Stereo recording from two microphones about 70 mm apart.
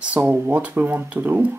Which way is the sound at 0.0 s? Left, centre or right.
Centre.